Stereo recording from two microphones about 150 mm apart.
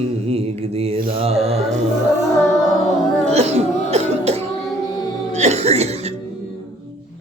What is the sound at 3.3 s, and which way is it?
Cough, 45° right (ahead or behind).